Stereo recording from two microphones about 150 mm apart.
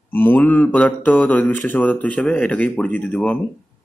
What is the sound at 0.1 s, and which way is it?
Speech, 15° left (ahead or behind).